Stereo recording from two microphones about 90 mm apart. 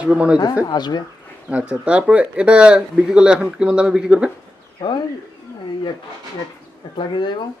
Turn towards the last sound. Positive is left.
turn(degrees=60)  # may be behind; listen again after turning